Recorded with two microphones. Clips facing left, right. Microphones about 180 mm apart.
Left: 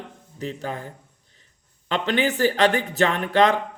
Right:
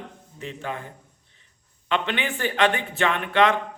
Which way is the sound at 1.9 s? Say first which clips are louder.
Left 4 dB; 40° left (ahead or behind).